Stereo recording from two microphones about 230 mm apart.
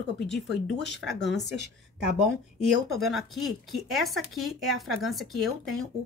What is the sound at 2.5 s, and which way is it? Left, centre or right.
Speech, centre.